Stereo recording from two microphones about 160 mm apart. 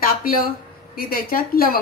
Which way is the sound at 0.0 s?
65° left (ahead or behind).